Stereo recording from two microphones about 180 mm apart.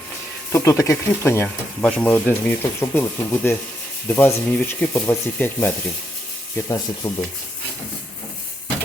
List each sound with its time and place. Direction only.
0.5 s speech: 15° left (ahead or behind)
7.0 s speech: 15° left (ahead or behind)